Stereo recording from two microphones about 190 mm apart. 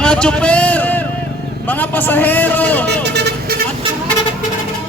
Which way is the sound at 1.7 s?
10° left (ahead or behind).